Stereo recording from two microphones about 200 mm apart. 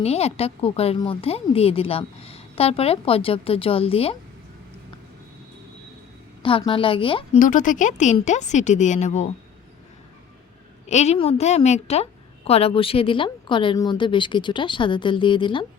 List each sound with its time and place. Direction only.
0.0 s a woman's voice: 30° left (ahead or behind)
6.4 s a woman's voice: 25° left (ahead or behind)
7.3 s speech: 40° left (ahead or behind)
10.8 s a woman's voice: 35° left (ahead or behind)